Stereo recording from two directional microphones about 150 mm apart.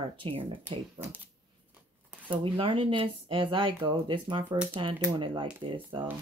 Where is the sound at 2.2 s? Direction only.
35° right (ahead or behind).